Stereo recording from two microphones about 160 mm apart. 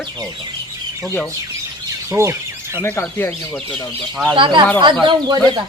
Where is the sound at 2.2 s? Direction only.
20° right (ahead or behind).